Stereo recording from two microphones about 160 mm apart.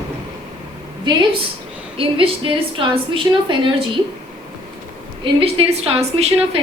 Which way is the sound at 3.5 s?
30° right (ahead or behind).